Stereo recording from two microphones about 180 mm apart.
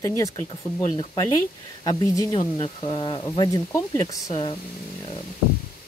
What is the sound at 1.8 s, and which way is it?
Speech, 20° left (ahead or behind).